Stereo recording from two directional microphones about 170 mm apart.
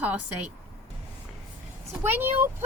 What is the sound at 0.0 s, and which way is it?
Speech, 10° right (ahead or behind).